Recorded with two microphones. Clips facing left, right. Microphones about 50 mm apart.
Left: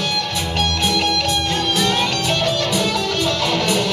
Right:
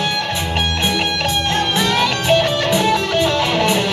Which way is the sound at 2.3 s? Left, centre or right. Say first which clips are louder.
Right 4 dB; right.